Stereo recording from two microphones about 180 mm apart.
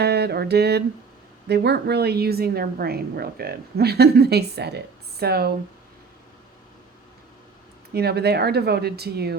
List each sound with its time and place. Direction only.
0.0 s mantra: 65° right (ahead or behind)
1.5 s a woman's voice: 65° right (ahead or behind)
7.9 s a woman's voice: 60° right (ahead or behind)